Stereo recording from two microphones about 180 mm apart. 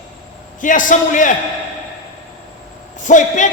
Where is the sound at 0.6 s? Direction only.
45° left (ahead or behind).